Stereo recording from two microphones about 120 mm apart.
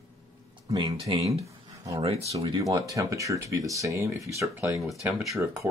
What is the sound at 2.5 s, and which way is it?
Speech, 30° right (ahead or behind).